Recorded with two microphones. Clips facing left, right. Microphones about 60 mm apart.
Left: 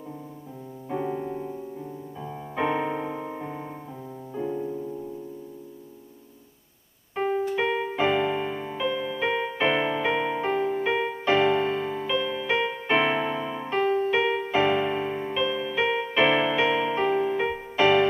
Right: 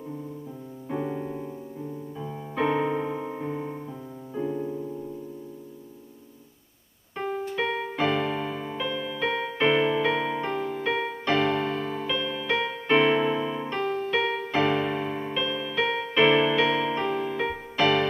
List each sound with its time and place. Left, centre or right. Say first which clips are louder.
0.8 s music: left 1 dB; centre
7.5 s music: left 2 dB; centre